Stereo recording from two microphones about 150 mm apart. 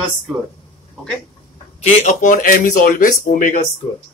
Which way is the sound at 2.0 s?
65° left (ahead or behind).